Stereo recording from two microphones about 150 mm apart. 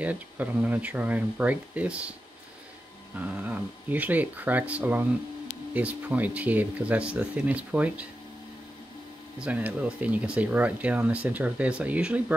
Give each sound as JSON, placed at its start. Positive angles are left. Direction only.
{"t": 0.0, "sound": "speech", "side_deg": -10}
{"t": 3.2, "sound": "speech", "side_deg": -10}
{"t": 9.4, "sound": "speech", "side_deg": -10}